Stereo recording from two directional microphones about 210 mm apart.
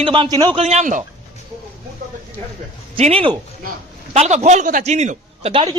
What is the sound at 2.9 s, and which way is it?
A man's voice, 25° right (ahead or behind).